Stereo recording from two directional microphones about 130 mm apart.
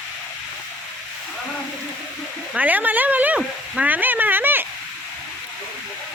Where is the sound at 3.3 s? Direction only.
10° right (ahead or behind).